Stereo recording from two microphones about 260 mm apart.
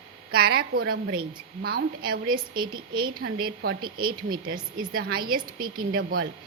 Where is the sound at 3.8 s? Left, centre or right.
Centre.